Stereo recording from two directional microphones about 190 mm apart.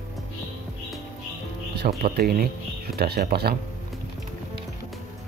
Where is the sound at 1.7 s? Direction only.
55° right (ahead or behind).